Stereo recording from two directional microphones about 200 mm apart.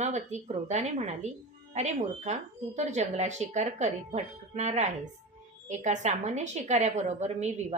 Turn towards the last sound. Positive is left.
turn(degrees=-35)  # may be behind; listen again after turning